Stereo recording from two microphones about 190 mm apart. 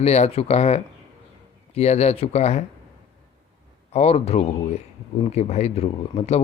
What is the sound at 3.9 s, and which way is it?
Speech, 35° left (ahead or behind).